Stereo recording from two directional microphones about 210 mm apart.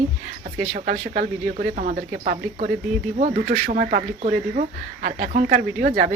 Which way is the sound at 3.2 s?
45° right (ahead or behind).